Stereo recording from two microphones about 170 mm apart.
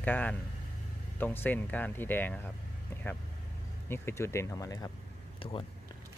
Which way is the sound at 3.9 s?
15° left (ahead or behind).